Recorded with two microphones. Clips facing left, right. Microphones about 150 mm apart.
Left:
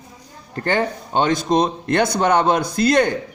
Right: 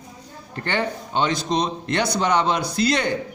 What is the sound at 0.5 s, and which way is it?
Speech, 40° left (ahead or behind).